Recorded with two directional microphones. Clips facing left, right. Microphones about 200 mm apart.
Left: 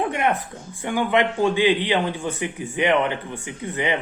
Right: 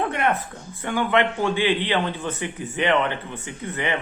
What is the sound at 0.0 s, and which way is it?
A man's voice, 15° left (ahead or behind).